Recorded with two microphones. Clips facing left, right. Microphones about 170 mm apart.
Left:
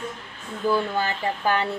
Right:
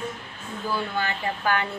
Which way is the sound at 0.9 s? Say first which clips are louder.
Left 2 dB; 35° left (ahead or behind).